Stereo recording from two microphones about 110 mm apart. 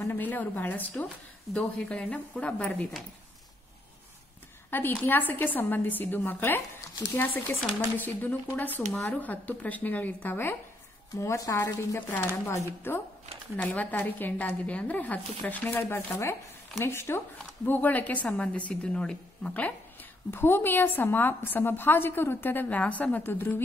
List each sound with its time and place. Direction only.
0.1 s a woman's voice: 15° left (ahead or behind)
1.0 s a woman's voice: 5° left (ahead or behind)
4.6 s a woman's voice: 20° left (ahead or behind)
8.5 s a woman's voice: 15° left (ahead or behind)